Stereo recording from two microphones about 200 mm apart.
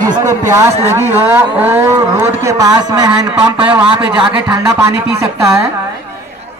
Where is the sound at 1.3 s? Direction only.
10° right (ahead or behind).